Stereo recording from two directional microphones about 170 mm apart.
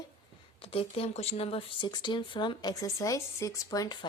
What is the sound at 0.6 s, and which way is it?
A woman's voice, 35° left (ahead or behind).